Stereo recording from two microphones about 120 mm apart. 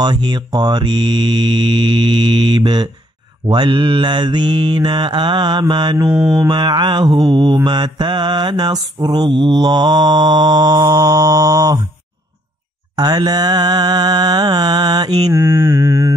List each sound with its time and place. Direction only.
0.0 s mantra: 40° right (ahead or behind)
6.0 s mantra: 5° right (ahead or behind)
6.3 s mantra: 40° right (ahead or behind)
12.9 s mantra: 35° right (ahead or behind)
15.3 s mantra: 20° right (ahead or behind)